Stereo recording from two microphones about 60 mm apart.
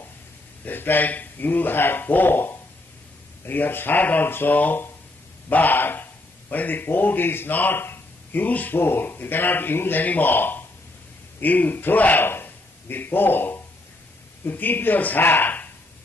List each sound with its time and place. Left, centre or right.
0.7 s a man's voice: left